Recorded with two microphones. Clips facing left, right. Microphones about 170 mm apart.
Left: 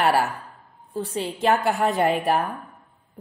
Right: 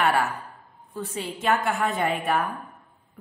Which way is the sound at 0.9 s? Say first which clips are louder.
Left 4 dB; 30° left (ahead or behind).